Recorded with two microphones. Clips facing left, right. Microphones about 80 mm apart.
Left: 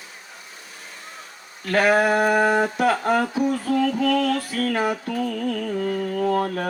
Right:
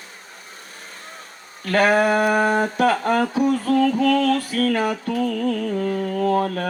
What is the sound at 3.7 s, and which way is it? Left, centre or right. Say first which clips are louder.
Music: right 3 dB; right.